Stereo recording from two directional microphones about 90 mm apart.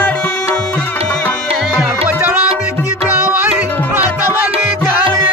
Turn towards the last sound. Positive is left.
turn(degrees=-15)  # may be behind; listen again after turning